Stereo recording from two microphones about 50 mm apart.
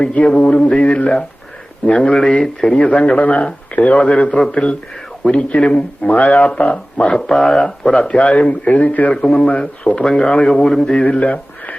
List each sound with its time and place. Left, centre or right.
0.1 s speech: left; by 2.7 s centre
2.7 s speech: left
5.5 s speech: left
7.2 s speech: centre; by 9.1 s left
9.1 s speech: centre
11.1 s a sound: left